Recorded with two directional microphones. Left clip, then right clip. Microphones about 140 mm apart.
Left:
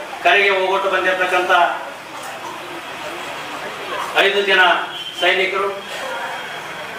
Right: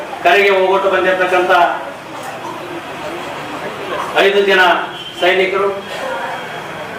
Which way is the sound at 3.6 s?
15° right (ahead or behind).